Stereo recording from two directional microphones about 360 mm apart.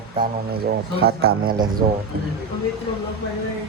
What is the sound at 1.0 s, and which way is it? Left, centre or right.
Speech, right.